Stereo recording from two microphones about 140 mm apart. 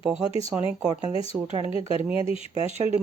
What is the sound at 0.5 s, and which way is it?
Speech, 5° right (ahead or behind).